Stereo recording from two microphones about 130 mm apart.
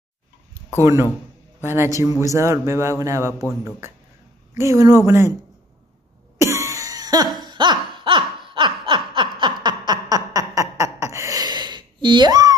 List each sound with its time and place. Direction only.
1.6 s a man's voice: 20° right (ahead or behind)
4.6 s a man's voice: 25° right (ahead or behind)
6.3 s cough: 25° right (ahead or behind)
7.3 s laughter: 35° right (ahead or behind)
9.1 s snicker: 35° right (ahead or behind)
9.6 s a sound: 35° right (ahead or behind)